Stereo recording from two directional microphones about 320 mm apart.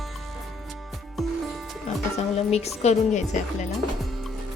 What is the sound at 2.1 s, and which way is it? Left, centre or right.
Music, centre.